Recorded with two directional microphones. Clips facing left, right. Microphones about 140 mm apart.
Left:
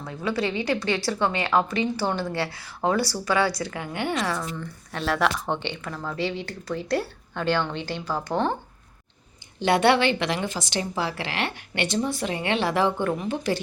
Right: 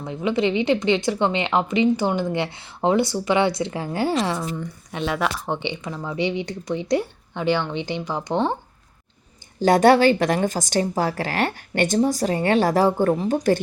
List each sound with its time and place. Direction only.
0.0 s speech: 20° right (ahead or behind)
4.9 s speech: 5° right (ahead or behind)
9.6 s a woman's voice: 40° right (ahead or behind)